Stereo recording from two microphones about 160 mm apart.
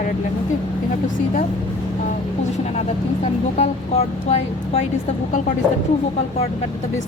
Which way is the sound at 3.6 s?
40° left (ahead or behind).